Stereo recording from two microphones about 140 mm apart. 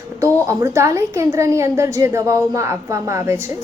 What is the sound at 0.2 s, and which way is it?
A woman's voice, 20° right (ahead or behind).